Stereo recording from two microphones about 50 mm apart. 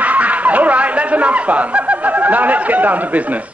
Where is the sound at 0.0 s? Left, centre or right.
Right.